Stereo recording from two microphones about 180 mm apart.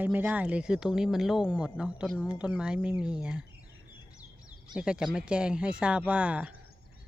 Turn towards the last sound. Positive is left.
turn(degrees=-5)  # may be behind; listen again after turning